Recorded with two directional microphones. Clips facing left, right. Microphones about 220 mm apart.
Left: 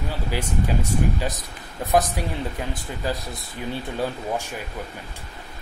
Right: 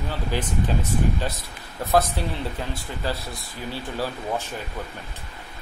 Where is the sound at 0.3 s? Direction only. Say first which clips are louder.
Even; 10° left (ahead or behind).